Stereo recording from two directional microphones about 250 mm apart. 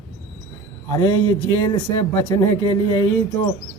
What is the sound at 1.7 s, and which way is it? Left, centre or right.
Speech, centre.